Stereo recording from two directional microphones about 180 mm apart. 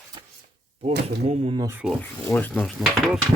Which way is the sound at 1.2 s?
35° right (ahead or behind).